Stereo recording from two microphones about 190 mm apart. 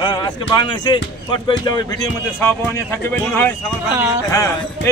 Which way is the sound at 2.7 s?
10° left (ahead or behind).